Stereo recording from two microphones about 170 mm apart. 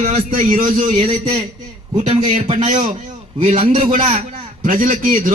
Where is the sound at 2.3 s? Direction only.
45° right (ahead or behind).